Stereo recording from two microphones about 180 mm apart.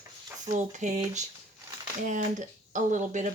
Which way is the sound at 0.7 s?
40° right (ahead or behind).